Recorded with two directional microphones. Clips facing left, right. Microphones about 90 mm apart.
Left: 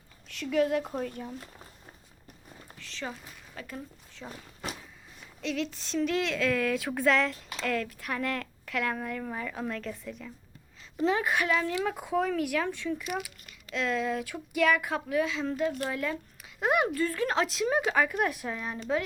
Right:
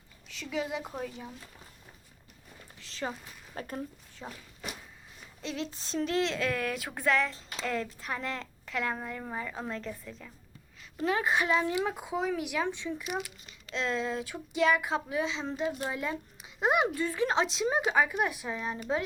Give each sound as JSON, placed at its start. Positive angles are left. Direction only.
{"t": 0.3, "sound": "speech", "side_deg": -5}
{"t": 2.7, "sound": "a sound", "side_deg": -35}
{"t": 3.5, "sound": "speech", "side_deg": -40}
{"t": 4.2, "sound": "a woman's voice", "side_deg": -20}
{"t": 5.5, "sound": "a sound", "side_deg": -35}
{"t": 5.9, "sound": "a woman's voice", "side_deg": -25}
{"t": 13.7, "sound": "a woman's voice", "side_deg": -30}
{"t": 15.7, "sound": "a woman's voice", "side_deg": -15}